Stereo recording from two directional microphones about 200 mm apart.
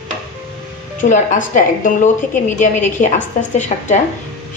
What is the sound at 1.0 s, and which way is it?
A woman's voice, 40° left (ahead or behind).